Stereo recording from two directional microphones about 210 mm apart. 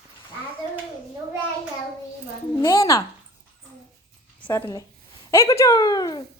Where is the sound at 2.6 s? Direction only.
15° left (ahead or behind).